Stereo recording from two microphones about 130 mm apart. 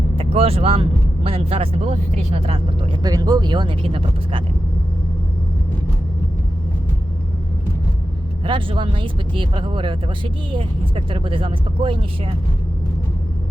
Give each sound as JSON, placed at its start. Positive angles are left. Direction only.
{"t": 0.2, "sound": "speech", "side_deg": -50}
{"t": 3.0, "sound": "speech", "side_deg": -30}
{"t": 8.4, "sound": "speech", "side_deg": -40}